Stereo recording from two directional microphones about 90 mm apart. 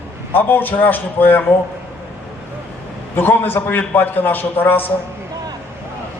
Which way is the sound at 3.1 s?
20° left (ahead or behind).